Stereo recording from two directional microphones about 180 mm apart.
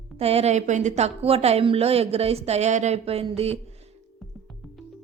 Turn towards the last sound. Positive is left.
turn(degrees=-35)  # may be behind; listen again after turning